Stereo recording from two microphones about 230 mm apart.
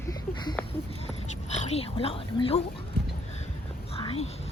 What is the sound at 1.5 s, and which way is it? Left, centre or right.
Speech, left.